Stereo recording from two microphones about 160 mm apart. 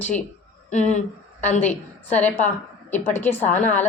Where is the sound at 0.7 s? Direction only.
45° left (ahead or behind).